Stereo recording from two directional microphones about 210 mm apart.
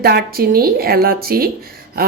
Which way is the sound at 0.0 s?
50° right (ahead or behind).